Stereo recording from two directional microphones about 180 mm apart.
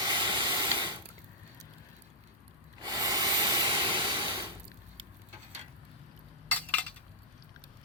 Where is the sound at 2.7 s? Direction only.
25° right (ahead or behind).